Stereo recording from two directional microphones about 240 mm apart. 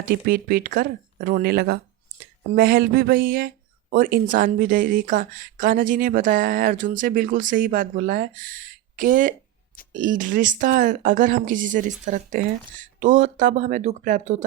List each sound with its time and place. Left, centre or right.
0.0 s speech: right